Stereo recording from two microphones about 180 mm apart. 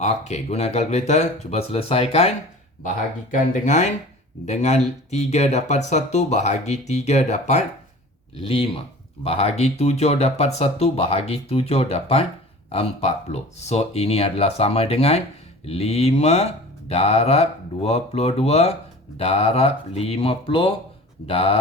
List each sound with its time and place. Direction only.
0.0 s speech: 40° left (ahead or behind)
3.3 s speech: 45° left (ahead or behind)